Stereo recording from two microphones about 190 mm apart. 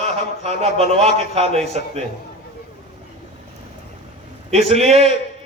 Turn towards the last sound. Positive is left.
turn(degrees=-35)  # may be behind; listen again after turning